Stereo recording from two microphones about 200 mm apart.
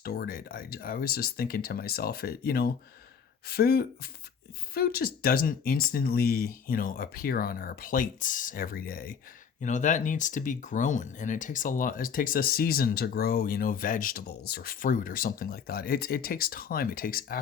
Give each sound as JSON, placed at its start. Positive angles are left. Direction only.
{"t": 0.0, "sound": "speech", "side_deg": 50}
{"t": 9.6, "sound": "speech", "side_deg": 40}